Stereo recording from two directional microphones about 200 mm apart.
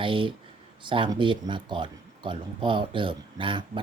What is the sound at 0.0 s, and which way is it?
Speech, 25° right (ahead or behind).